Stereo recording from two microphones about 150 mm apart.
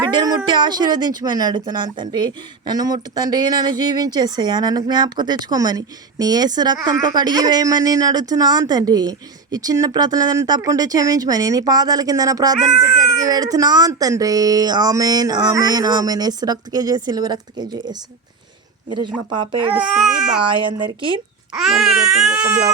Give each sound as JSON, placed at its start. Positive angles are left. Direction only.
{"t": 0.0, "sound": "speech", "side_deg": -30}
{"t": 18.9, "sound": "speech", "side_deg": -30}
{"t": 19.7, "sound": "speech", "side_deg": -5}
{"t": 20.4, "sound": "speech", "side_deg": -35}
{"t": 21.6, "sound": "speech", "side_deg": 0}